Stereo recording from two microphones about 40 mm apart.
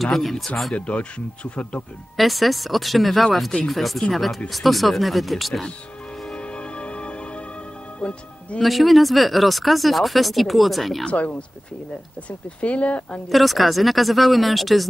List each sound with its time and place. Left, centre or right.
0.0 s speech: centre
0.7 s speech: left
2.1 s speech: centre
6.3 s music: left
8.0 s speech: left
8.5 s speech: centre
11.1 s speech: left
13.3 s speech: centre